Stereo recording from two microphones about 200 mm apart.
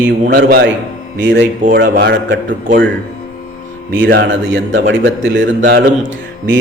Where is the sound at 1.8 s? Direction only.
55° right (ahead or behind).